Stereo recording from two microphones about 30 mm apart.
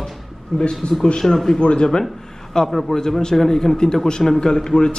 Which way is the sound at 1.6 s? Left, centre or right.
Left.